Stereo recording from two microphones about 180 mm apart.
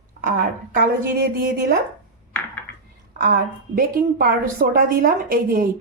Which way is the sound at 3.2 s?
55° right (ahead or behind).